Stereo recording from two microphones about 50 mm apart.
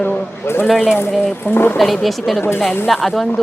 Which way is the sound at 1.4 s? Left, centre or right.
Left.